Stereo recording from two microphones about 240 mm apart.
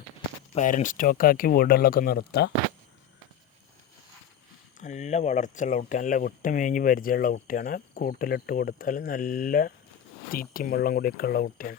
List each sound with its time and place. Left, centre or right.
0.5 s speech: left
4.8 s speech: left